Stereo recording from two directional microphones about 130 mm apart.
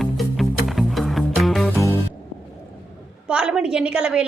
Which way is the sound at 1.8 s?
20° left (ahead or behind).